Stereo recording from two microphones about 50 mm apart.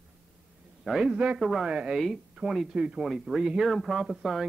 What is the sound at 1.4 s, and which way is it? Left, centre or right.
Speech, centre.